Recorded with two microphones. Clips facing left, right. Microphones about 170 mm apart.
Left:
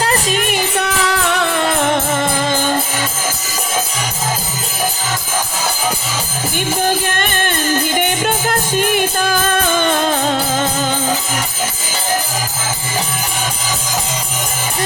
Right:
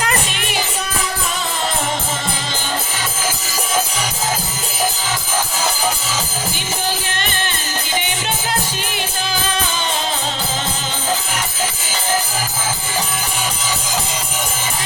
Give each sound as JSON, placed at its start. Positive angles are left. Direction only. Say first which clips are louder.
{"t": 0.0, "sound": "music", "louder": "left 5 dB", "side_deg": 35}
{"t": 6.8, "sound": "music", "louder": "left 4 dB", "side_deg": 50}